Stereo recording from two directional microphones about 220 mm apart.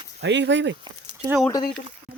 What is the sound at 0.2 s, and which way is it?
Speech, 55° right (ahead or behind).